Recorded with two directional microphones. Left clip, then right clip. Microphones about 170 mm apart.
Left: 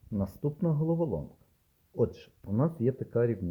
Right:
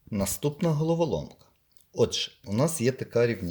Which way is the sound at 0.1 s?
25° right (ahead or behind).